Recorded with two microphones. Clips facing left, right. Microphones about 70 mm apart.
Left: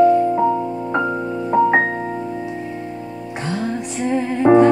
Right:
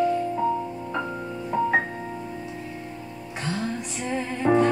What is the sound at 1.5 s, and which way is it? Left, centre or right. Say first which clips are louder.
Music: left 8 dB; left.